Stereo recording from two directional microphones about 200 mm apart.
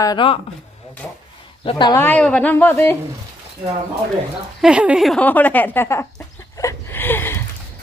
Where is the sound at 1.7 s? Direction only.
20° left (ahead or behind).